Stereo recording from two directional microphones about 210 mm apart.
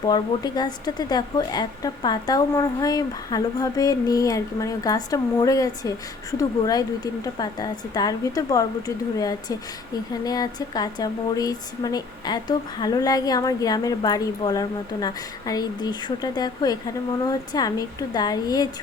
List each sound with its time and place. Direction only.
0.1 s a woman's voice: 20° left (ahead or behind)